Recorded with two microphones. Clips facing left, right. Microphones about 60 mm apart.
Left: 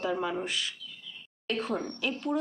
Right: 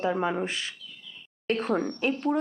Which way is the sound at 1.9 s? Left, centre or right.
Right.